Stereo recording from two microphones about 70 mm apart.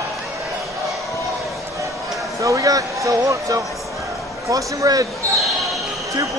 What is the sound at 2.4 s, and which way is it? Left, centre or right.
Speech, right.